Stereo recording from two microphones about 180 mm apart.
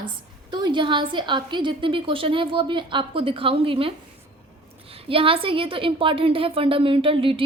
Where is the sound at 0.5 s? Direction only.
25° right (ahead or behind).